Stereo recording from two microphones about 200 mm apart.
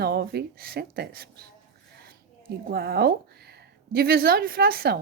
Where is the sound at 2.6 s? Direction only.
50° right (ahead or behind).